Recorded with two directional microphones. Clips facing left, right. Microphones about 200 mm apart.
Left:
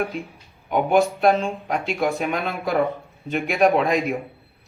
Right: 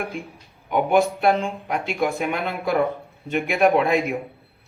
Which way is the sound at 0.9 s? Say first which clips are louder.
Left 1 dB; 15° right (ahead or behind).